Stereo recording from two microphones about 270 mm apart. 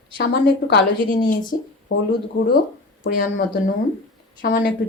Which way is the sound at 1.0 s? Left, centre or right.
Centre.